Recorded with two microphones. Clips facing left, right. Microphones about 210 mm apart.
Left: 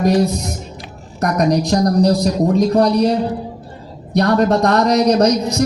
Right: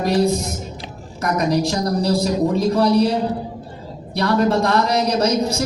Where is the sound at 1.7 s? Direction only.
45° left (ahead or behind).